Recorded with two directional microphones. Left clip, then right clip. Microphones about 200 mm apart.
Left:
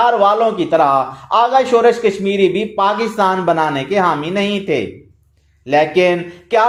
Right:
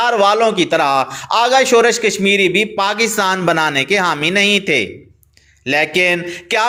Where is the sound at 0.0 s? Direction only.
20° right (ahead or behind).